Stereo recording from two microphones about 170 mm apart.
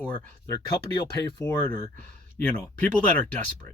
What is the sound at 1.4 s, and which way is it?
Speech, 15° left (ahead or behind).